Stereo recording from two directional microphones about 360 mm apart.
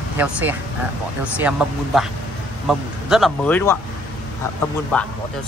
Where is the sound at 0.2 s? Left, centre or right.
Centre.